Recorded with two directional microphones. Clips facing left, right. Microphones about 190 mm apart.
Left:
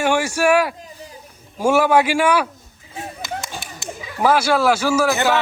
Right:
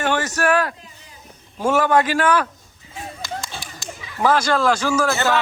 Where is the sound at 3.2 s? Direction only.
20° left (ahead or behind).